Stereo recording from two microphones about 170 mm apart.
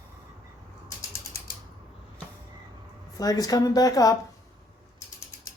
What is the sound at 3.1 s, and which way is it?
A woman's voice, 20° left (ahead or behind).